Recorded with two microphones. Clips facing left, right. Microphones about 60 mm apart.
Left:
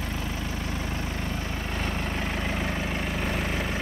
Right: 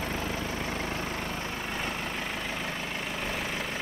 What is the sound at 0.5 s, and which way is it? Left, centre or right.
Vehicle, right.